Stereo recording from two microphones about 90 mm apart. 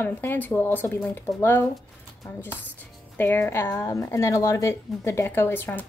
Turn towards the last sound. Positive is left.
turn(degrees=25)  # may be behind; listen again after turning